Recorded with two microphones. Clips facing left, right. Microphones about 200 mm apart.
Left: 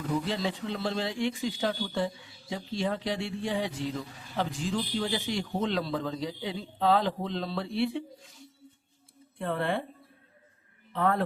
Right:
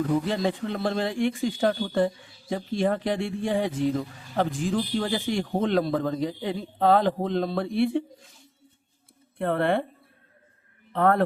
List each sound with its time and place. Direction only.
0.3 s speech: 50° right (ahead or behind)
9.4 s speech: 60° right (ahead or behind)
10.9 s speech: 55° right (ahead or behind)